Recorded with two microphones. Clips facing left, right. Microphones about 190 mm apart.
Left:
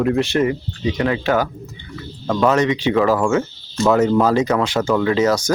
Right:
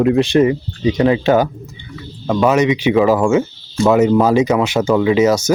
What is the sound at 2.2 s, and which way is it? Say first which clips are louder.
Speech: right 3 dB; 10° right (ahead or behind).